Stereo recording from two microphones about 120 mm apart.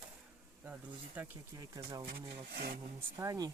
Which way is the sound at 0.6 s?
15° right (ahead or behind).